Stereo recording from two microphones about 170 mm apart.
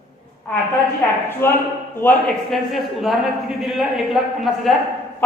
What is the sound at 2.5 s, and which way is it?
Speech, centre (ahead or behind).